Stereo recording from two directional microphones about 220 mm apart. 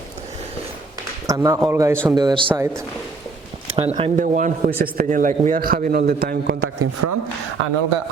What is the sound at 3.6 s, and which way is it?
A man's voice, 25° right (ahead or behind).